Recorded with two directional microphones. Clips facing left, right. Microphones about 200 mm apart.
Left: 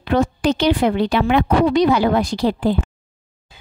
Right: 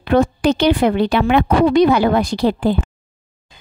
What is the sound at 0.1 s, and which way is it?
A woman's voice, 60° right (ahead or behind).